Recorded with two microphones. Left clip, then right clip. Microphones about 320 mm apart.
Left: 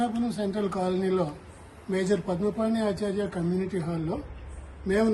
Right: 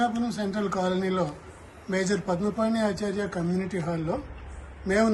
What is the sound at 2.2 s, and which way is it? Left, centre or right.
Speech, centre.